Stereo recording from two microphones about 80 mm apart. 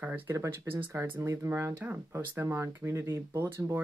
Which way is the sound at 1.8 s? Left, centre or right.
Right.